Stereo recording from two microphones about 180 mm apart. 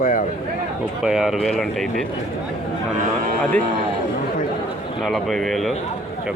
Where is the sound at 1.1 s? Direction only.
Centre (ahead or behind).